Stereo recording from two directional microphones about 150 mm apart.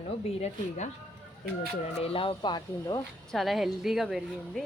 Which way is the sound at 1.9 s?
40° left (ahead or behind).